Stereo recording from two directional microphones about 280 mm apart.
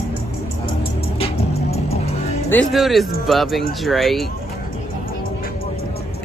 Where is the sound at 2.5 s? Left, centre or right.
Centre.